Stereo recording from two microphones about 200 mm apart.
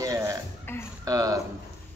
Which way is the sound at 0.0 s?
15° right (ahead or behind).